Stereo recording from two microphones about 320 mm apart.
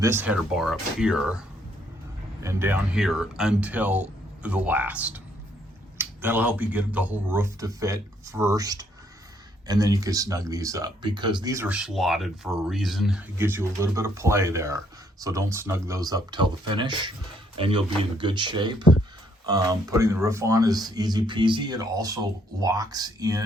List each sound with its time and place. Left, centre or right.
0.0 s speech: centre
2.4 s speech: centre